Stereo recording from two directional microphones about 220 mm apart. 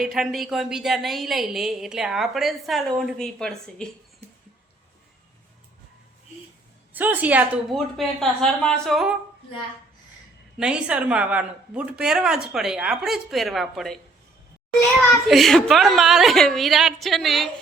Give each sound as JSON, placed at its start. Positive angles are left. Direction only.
{"t": 0.0, "sound": "a woman's voice", "side_deg": 0}
{"t": 6.9, "sound": "a woman's voice", "side_deg": -5}
{"t": 10.6, "sound": "a woman's voice", "side_deg": -5}
{"t": 15.3, "sound": "a woman's voice", "side_deg": 0}